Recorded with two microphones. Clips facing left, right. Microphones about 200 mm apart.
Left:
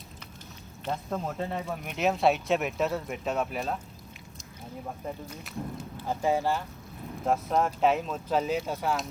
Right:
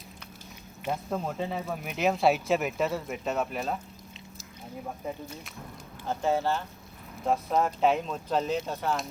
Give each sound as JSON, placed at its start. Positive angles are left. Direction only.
{"t": 0.9, "sound": "speech", "side_deg": -5}
{"t": 5.0, "sound": "speech", "side_deg": -5}
{"t": 5.6, "sound": "speech", "side_deg": 35}
{"t": 6.1, "sound": "speech", "side_deg": 10}
{"t": 7.3, "sound": "speech", "side_deg": 0}